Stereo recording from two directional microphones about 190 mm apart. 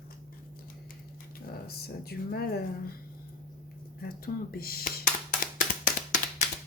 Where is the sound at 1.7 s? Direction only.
55° left (ahead or behind).